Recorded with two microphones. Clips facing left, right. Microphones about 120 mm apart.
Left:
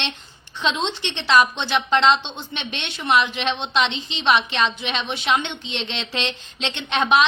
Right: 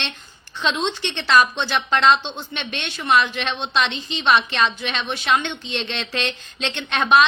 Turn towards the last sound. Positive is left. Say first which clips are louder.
# right 1 dB
turn(degrees=20)  # may be behind; listen again after turning